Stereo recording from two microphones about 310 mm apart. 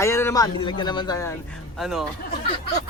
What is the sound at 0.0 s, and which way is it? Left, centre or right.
Speech, centre.